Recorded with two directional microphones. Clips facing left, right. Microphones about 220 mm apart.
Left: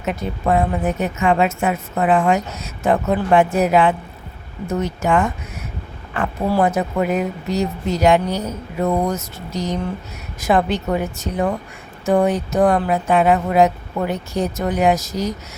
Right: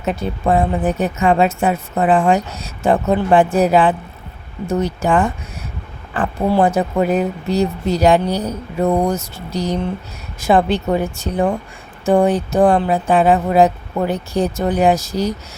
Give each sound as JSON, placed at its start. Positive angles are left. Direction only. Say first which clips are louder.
{"t": 0.0, "sound": "a woman's voice", "louder": "right 2 dB", "side_deg": -30}